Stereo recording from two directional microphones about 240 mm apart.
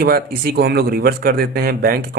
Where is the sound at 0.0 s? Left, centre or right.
Right.